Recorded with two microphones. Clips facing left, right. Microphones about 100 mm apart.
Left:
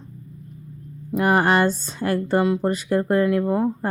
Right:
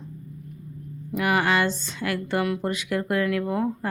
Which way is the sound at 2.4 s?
25° left (ahead or behind).